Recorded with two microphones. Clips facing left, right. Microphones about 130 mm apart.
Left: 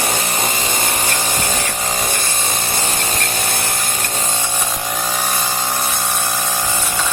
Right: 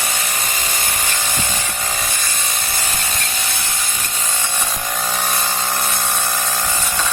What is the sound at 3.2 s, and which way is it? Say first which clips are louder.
Vehicle: left 5 dB; 45° left (ahead or behind).